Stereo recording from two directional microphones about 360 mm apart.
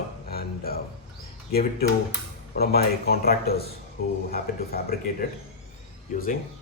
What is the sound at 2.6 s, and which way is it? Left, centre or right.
A man's voice, left.